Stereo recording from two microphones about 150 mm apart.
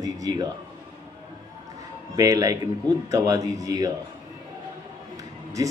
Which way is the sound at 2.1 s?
25° right (ahead or behind).